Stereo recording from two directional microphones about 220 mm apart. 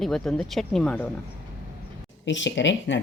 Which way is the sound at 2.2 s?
55° left (ahead or behind).